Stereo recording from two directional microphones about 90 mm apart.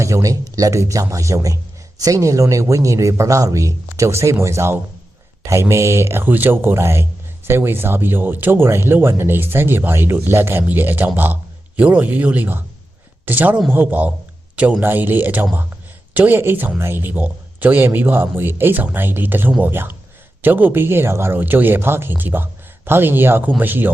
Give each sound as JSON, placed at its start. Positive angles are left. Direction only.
{"t": 0.0, "sound": "speech", "side_deg": -35}